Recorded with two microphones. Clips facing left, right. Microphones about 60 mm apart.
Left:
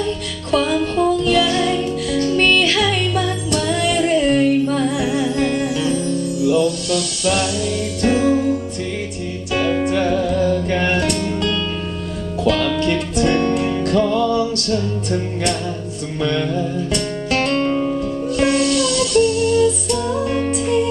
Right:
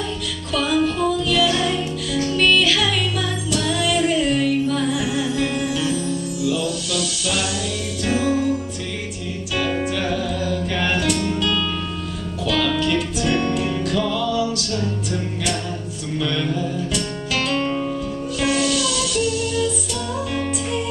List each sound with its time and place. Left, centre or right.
0.7 s music: centre
1.1 s music: left
1.6 s music: centre
2.3 s music: left
5.2 s music: centre
6.4 s music: left
8.1 s music: centre
10.1 s music: left
13.3 s music: centre
16.5 s music: left
17.5 s music: centre
19.1 s music: left